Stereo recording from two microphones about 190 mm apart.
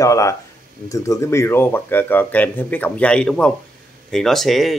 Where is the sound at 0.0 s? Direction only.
15° left (ahead or behind).